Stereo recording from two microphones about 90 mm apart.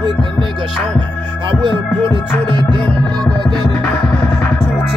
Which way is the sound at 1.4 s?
65° right (ahead or behind).